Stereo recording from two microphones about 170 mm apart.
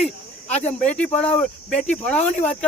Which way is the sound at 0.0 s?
40° left (ahead or behind).